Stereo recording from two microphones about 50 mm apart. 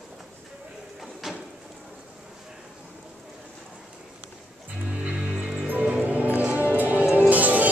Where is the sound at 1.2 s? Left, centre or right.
Centre.